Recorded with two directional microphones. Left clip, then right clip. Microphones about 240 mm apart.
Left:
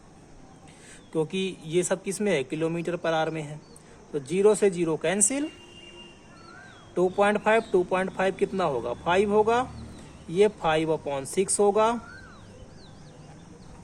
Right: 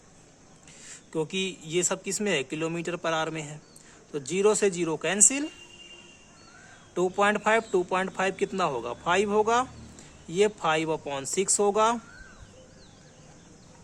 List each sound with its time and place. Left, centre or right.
1.1 s speech: centre
6.9 s a man's voice: centre